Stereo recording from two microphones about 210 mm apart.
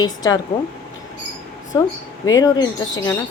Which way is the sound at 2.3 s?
15° left (ahead or behind).